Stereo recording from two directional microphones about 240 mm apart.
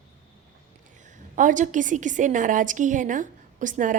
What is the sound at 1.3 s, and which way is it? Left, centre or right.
A woman's voice, right.